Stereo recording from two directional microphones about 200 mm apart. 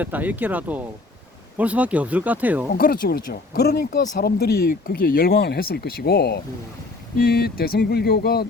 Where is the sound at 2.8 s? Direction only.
45° left (ahead or behind).